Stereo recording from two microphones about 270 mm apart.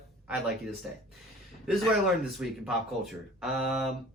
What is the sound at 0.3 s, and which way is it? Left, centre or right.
Speech, centre.